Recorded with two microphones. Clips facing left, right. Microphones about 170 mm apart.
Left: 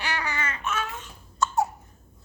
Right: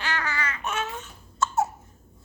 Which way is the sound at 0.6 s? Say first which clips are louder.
Even; 30° right (ahead or behind).